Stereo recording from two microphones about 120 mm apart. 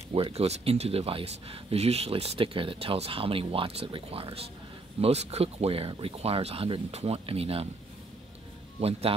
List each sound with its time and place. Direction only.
0.1 s speech: 55° right (ahead or behind)
5.0 s speech: 60° right (ahead or behind)